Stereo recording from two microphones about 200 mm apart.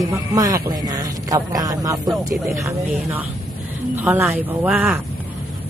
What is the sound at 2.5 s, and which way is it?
Speech, 10° right (ahead or behind).